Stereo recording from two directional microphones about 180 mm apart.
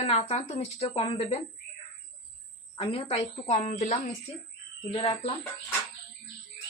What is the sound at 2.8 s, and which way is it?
Speech, 30° left (ahead or behind).